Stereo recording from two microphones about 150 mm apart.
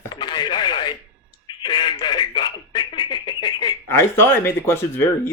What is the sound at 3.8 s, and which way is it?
Speech, 15° left (ahead or behind).